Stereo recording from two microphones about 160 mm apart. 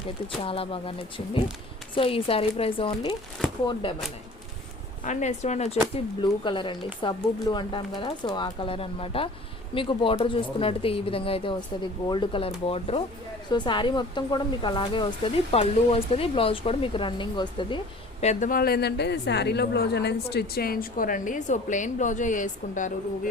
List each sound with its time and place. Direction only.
0.4 s speech: 35° left (ahead or behind)
3.4 s a sound: 5° left (ahead or behind)
3.8 s speech: 35° left (ahead or behind)
5.0 s speech: 45° left (ahead or behind)
6.2 s speech: 30° left (ahead or behind)
18.2 s a woman's voice: 50° left (ahead or behind)